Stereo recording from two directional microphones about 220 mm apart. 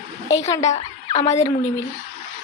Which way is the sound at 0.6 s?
30° left (ahead or behind).